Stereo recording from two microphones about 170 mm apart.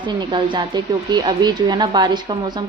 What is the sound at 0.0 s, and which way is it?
A woman's voice, 30° right (ahead or behind).